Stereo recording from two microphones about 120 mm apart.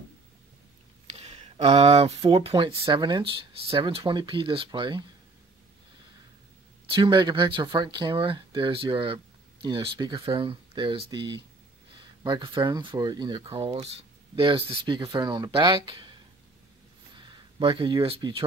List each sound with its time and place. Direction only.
1.0 s speech: 60° right (ahead or behind); by 5.0 s 40° right (ahead or behind)
7.0 s speech: 40° right (ahead or behind)
17.2 s speech: 45° right (ahead or behind)